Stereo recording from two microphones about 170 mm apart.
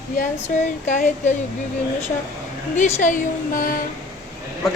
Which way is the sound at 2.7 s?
50° left (ahead or behind).